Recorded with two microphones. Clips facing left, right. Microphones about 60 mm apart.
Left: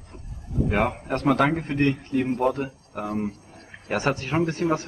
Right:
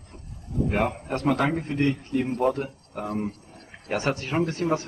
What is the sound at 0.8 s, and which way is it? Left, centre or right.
A man's voice, left.